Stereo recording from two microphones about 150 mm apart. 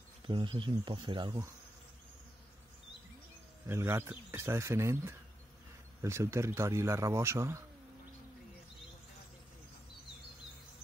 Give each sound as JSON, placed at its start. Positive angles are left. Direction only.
{"t": 0.3, "sound": "speech", "side_deg": -30}
{"t": 3.6, "sound": "a man's voice", "side_deg": -15}